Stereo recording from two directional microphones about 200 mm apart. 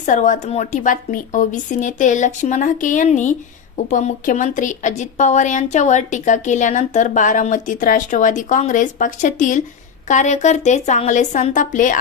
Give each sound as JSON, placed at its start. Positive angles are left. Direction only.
{"t": 0.0, "sound": "speech", "side_deg": 40}